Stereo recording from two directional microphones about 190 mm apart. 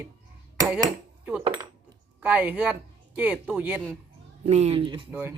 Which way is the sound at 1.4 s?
25° right (ahead or behind).